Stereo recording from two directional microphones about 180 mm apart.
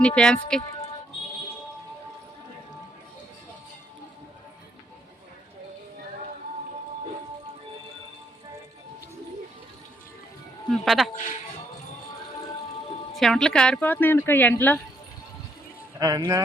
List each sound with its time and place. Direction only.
0.0 s speech: 5° left (ahead or behind)
10.7 s speech: centre (ahead or behind)
13.1 s speech: centre (ahead or behind)
16.0 s speech: 20° right (ahead or behind)